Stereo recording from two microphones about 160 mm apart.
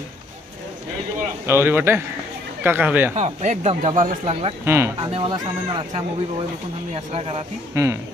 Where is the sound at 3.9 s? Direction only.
55° right (ahead or behind).